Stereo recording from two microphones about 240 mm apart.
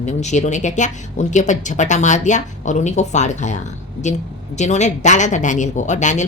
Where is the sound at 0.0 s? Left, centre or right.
Left.